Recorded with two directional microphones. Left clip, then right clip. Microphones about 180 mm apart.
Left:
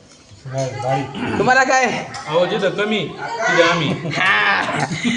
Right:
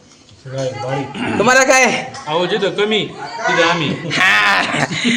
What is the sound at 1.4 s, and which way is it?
Speech, 60° right (ahead or behind).